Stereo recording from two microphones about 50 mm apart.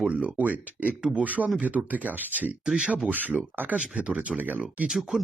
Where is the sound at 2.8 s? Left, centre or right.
Right.